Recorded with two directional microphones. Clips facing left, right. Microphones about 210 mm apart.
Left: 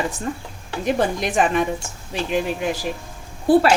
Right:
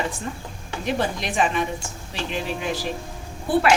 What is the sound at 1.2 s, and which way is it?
Speech, 45° left (ahead or behind).